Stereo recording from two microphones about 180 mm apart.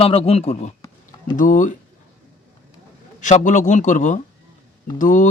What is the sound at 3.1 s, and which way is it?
Speech, 45° left (ahead or behind).